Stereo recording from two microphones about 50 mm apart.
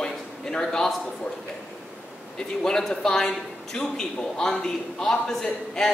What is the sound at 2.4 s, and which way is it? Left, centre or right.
A man's voice, centre.